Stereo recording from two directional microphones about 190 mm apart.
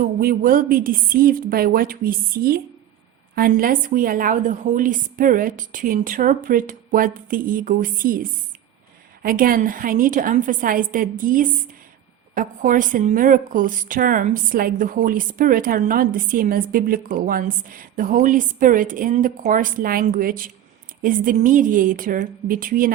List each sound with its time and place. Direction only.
0.0 s a woman's voice: 50° right (ahead or behind)